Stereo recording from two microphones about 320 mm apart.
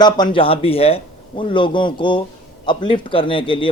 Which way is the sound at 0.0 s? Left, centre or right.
Centre.